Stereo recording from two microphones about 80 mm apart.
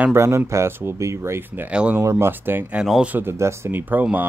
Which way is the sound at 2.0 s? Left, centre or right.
Right.